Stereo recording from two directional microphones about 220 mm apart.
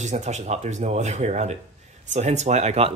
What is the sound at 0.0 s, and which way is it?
Speech, 35° right (ahead or behind).